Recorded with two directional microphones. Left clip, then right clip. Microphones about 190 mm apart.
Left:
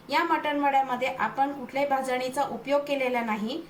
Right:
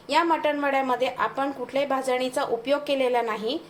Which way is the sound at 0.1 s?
50° right (ahead or behind).